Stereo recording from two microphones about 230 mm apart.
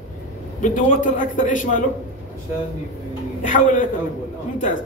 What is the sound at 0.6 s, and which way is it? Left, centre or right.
A man's voice, left.